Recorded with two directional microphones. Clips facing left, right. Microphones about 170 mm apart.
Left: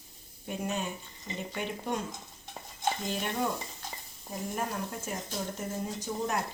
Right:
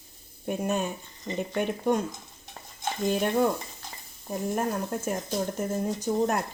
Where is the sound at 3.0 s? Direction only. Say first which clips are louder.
Right 9 dB; 50° right (ahead or behind).